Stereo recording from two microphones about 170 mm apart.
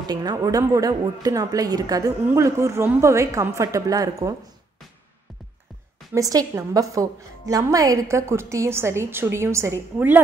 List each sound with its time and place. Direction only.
0.1 s a woman's voice: 25° right (ahead or behind)
6.1 s a woman's voice: 20° right (ahead or behind)